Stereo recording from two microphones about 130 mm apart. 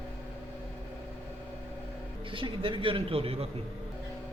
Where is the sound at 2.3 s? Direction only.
40° right (ahead or behind).